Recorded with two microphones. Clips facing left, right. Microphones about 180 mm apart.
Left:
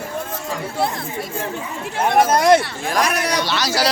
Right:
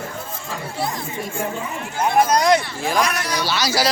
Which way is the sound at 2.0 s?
60° left (ahead or behind).